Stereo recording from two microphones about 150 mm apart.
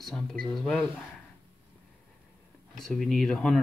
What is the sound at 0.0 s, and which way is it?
Speech, centre (ahead or behind).